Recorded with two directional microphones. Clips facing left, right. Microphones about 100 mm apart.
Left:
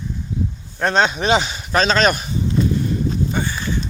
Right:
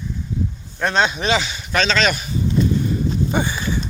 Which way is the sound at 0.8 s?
35° left (ahead or behind).